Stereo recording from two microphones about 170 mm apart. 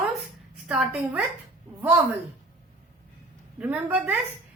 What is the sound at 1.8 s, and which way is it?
Speech, 15° right (ahead or behind).